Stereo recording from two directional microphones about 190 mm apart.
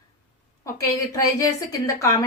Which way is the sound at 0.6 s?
15° left (ahead or behind).